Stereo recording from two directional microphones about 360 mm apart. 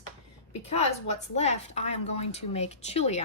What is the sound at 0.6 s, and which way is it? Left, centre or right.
A woman's voice, centre.